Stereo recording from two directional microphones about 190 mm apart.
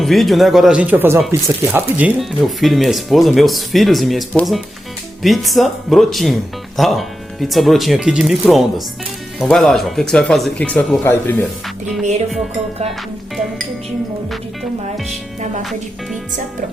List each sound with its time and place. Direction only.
0.0 s speech: centre (ahead or behind)
14.3 s speech: centre (ahead or behind)